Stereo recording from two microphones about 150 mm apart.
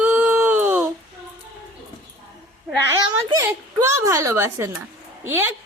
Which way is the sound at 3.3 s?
20° right (ahead or behind).